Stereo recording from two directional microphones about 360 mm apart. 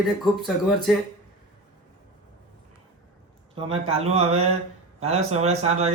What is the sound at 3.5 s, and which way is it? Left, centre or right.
Mantra, centre.